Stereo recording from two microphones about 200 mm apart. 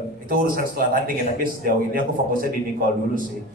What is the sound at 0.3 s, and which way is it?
A man's voice, 45° right (ahead or behind).